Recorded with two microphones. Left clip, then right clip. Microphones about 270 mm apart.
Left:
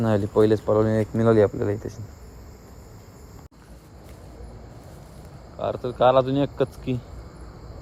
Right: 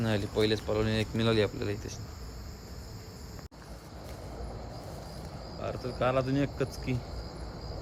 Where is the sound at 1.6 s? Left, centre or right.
Centre.